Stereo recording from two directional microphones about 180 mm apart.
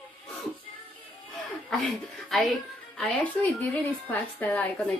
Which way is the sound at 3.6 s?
10° left (ahead or behind).